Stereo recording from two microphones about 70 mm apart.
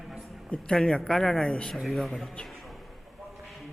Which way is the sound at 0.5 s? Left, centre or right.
Centre.